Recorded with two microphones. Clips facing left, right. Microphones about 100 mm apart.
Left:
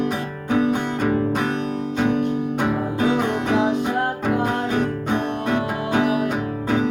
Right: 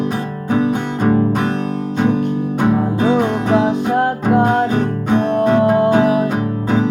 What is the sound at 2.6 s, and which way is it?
Music, 40° right (ahead or behind).